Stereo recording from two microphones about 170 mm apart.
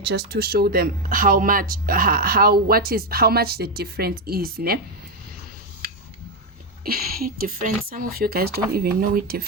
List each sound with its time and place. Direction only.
0.0 s speech: 75° right (ahead or behind)
5.8 s a sound: 65° right (ahead or behind)
6.8 s speech: 60° right (ahead or behind)